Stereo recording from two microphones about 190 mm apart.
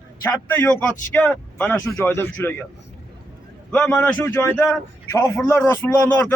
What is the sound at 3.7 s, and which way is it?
A man's voice, 5° left (ahead or behind).